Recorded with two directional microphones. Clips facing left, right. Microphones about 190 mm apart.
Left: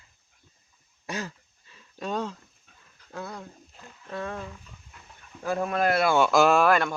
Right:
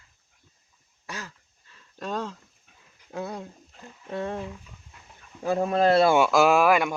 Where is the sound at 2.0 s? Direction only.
Centre (ahead or behind).